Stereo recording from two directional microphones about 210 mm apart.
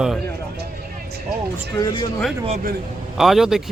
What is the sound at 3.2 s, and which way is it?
Speech, centre (ahead or behind).